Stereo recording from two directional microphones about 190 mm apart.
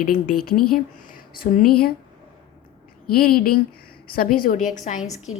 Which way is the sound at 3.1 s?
50° left (ahead or behind).